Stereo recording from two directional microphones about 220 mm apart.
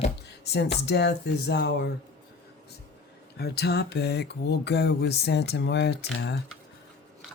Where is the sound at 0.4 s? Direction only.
50° left (ahead or behind).